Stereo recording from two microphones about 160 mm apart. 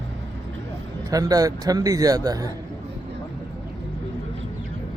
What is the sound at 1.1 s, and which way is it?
A man's voice, 20° right (ahead or behind).